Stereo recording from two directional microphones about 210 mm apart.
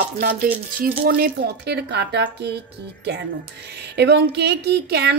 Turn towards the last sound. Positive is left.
turn(degrees=-50)  # may be behind; listen again after turning